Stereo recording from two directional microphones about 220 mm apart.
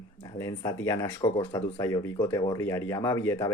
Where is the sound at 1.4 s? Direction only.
25° left (ahead or behind).